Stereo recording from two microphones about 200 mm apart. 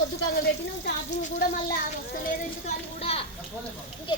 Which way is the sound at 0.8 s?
45° left (ahead or behind).